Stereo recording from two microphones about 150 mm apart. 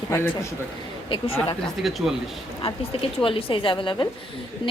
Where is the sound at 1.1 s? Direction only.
35° left (ahead or behind).